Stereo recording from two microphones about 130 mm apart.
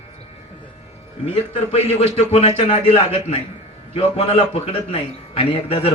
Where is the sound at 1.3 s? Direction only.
55° left (ahead or behind).